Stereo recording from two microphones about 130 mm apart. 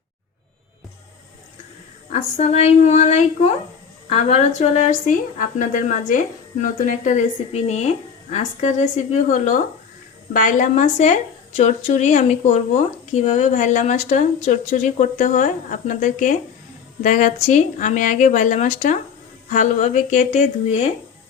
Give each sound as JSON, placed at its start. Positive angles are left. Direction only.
{"t": 2.1, "sound": "speech", "side_deg": 55}
{"t": 10.3, "sound": "speech", "side_deg": 85}